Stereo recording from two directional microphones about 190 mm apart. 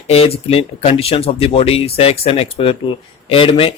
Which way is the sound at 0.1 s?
30° left (ahead or behind).